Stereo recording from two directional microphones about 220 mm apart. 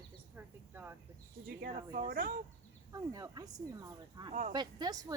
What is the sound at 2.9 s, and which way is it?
Speech, 15° right (ahead or behind).